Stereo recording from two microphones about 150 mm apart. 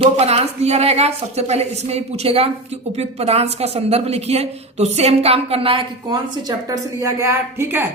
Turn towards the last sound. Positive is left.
turn(degrees=-15)  # may be behind; listen again after turning